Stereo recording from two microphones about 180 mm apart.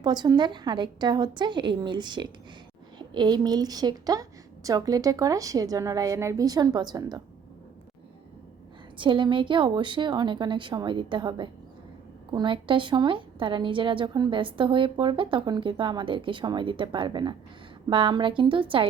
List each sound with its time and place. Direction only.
0.0 s a woman's voice: 25° right (ahead or behind)
9.0 s a woman's voice: 25° right (ahead or behind)